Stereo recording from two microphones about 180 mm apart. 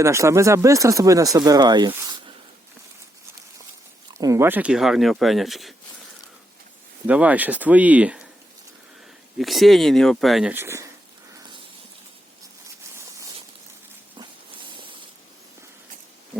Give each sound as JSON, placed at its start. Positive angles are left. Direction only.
{"t": 0.0, "sound": "speech", "side_deg": -15}
{"t": 4.1, "sound": "speech", "side_deg": -20}
{"t": 7.1, "sound": "speech", "side_deg": -10}
{"t": 9.4, "sound": "speech", "side_deg": 0}
{"t": 10.5, "sound": "speech", "side_deg": -15}
{"t": 14.2, "sound": "a sound", "side_deg": -25}